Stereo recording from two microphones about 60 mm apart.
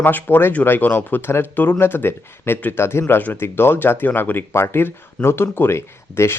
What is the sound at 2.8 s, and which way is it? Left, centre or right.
Speech, left.